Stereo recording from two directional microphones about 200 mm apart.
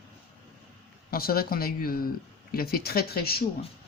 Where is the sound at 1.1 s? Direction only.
50° left (ahead or behind).